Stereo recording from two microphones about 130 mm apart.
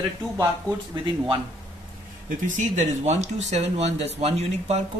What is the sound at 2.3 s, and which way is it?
Speech, 70° right (ahead or behind).